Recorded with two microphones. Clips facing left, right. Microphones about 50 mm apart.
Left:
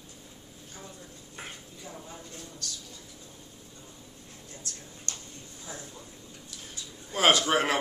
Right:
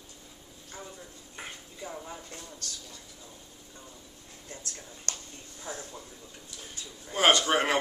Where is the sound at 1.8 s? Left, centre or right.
Right.